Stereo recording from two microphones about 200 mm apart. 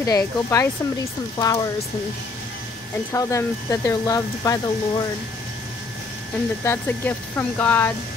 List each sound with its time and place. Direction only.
0.0 s speech: 15° left (ahead or behind)
3.1 s speech: 15° left (ahead or behind)
6.6 s speech: 10° left (ahead or behind)